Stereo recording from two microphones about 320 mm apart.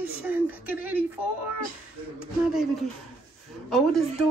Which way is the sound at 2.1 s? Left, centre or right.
Centre.